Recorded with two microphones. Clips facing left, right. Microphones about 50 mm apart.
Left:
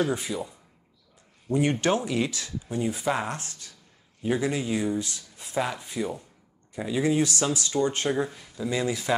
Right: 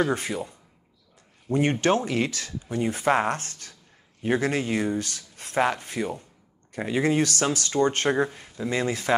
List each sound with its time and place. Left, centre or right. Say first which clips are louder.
0.1 s speech: right 2 dB; right
1.5 s speech: right 2 dB; right
5.9 s speech: right 1 dB; right
8.3 s speech: right 1 dB; right
8.6 s speech: right 1 dB; right